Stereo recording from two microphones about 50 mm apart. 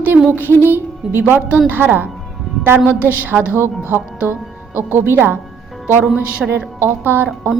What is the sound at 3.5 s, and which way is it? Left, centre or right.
Music, right.